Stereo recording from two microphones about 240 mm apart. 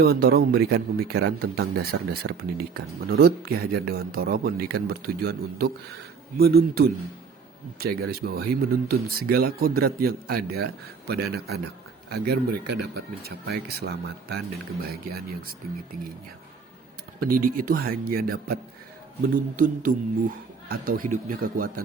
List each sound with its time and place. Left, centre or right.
0.0 s a man's voice: right
17.2 s a man's voice: right